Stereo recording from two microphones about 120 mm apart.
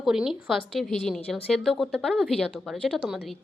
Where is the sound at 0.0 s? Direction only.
5° right (ahead or behind).